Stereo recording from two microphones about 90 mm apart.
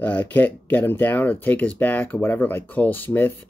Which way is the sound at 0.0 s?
15° left (ahead or behind).